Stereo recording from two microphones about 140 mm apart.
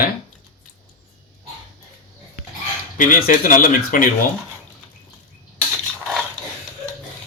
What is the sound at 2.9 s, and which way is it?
Speech, 70° left (ahead or behind).